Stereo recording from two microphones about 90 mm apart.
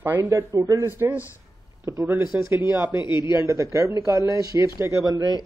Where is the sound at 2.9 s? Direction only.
55° left (ahead or behind).